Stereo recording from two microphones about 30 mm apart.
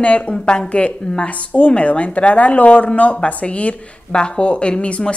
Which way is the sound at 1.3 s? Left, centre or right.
Left.